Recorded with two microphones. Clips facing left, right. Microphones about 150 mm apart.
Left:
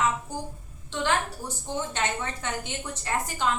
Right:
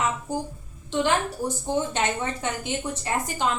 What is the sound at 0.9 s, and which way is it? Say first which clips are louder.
A woman's voice: right 4 dB; 15° right (ahead or behind).